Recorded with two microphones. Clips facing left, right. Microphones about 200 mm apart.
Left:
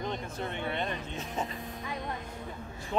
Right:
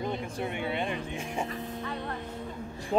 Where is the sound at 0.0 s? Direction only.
10° right (ahead or behind).